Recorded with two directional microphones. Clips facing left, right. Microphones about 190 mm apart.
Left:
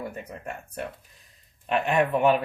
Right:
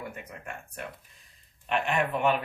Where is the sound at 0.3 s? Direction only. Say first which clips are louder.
Left 5 dB; 35° left (ahead or behind).